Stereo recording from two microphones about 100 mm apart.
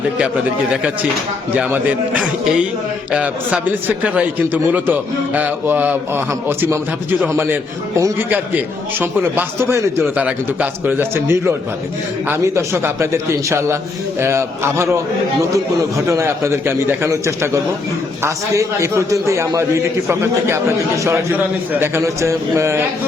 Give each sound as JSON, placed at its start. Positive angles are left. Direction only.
{"t": 1.5, "sound": "a man's voice", "side_deg": -15}
{"t": 10.2, "sound": "a man's voice", "side_deg": -15}